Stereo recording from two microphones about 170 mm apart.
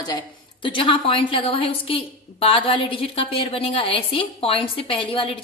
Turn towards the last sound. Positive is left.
turn(degrees=30)  # may be behind; listen again after turning